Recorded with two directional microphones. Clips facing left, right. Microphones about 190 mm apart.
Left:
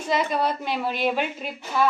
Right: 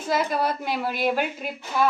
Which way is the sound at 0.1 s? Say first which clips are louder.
Even; 5° right (ahead or behind).